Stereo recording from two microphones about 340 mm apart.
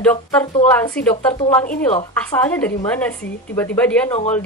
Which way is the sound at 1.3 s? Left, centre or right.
Left.